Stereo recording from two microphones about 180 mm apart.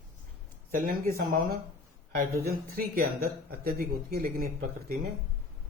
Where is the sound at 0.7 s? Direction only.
50° right (ahead or behind).